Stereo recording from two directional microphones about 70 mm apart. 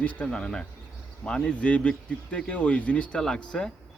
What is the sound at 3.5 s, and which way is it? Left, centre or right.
Speech, centre.